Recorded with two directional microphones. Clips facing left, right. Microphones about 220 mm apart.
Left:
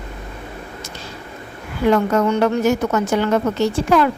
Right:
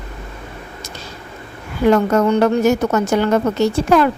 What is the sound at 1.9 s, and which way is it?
A woman's voice, 40° right (ahead or behind).